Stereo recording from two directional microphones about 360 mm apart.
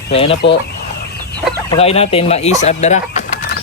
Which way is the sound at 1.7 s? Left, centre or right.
Centre.